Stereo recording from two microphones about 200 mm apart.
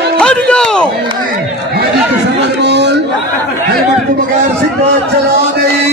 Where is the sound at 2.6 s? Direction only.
55° right (ahead or behind).